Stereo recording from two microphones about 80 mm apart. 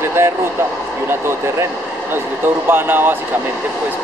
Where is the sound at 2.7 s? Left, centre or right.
Right.